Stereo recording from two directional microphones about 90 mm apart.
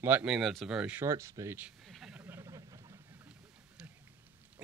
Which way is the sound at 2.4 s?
40° right (ahead or behind).